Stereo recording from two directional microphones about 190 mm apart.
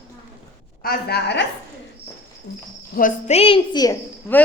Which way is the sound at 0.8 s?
55° left (ahead or behind).